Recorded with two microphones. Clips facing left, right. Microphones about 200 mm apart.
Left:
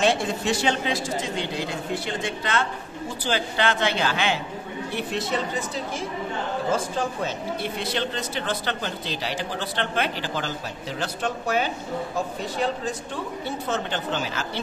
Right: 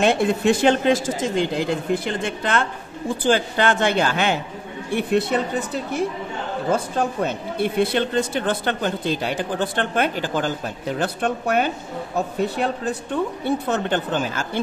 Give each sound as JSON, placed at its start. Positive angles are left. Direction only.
{"t": 0.0, "sound": "speech", "side_deg": -55}